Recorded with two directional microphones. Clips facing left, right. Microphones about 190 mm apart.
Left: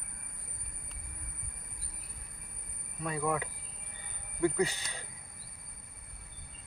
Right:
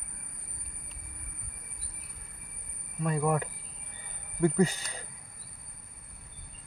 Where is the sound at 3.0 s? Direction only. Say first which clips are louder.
Right 4 dB; 45° right (ahead or behind).